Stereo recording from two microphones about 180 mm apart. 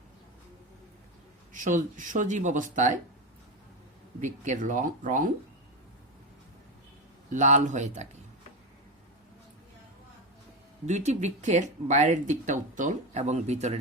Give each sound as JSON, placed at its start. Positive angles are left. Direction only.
{"t": 1.5, "sound": "speech", "side_deg": -45}
{"t": 4.2, "sound": "speech", "side_deg": -45}
{"t": 7.3, "sound": "speech", "side_deg": -40}
{"t": 10.8, "sound": "speech", "side_deg": -40}